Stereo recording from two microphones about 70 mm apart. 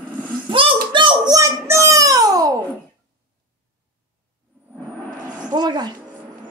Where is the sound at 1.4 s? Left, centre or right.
Right.